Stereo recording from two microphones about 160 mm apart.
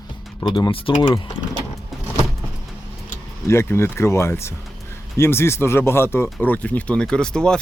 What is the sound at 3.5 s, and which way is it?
Speech, 15° left (ahead or behind).